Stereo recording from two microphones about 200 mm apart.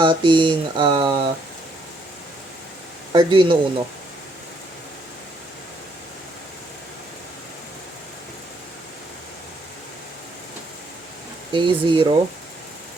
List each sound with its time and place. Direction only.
0.0 s speech: 25° right (ahead or behind)
3.1 s speech: 25° right (ahead or behind)
11.5 s speech: 25° right (ahead or behind)